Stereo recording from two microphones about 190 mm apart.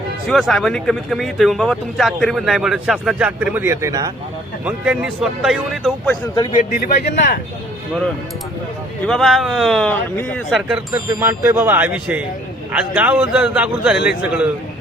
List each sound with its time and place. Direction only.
0.3 s speech: centre (ahead or behind); by 4.1 s 15° right (ahead or behind)
4.6 s speech: 5° right (ahead or behind)
6.5 s a man's voice: 45° left (ahead or behind)
9.0 s speech: centre (ahead or behind)
10.5 s speech: 5° right (ahead or behind)
10.9 s a man's voice: 15° right (ahead or behind)